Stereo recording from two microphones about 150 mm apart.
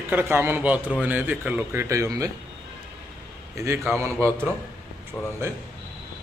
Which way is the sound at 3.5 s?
20° right (ahead or behind).